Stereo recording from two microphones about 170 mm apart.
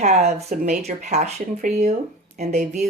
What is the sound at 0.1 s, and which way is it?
Speech, 40° right (ahead or behind).